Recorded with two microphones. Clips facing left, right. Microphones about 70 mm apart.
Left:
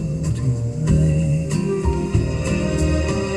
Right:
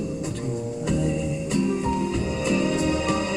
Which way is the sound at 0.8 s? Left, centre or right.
Centre.